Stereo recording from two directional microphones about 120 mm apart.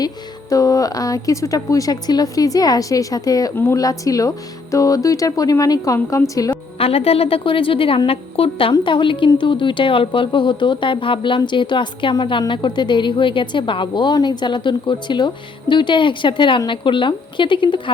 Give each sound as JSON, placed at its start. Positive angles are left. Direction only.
{"t": 0.5, "sound": "speech", "side_deg": 30}
{"t": 3.5, "sound": "speech", "side_deg": 20}
{"t": 6.7, "sound": "speech", "side_deg": 55}